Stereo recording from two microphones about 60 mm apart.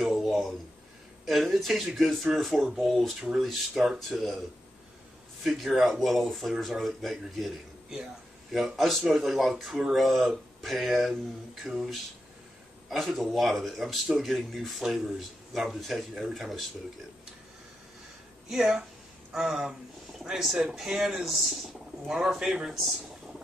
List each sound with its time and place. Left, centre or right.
0.0 s a sound: centre
1.2 s speech: centre
5.4 s speech: centre
18.5 s a man's voice: centre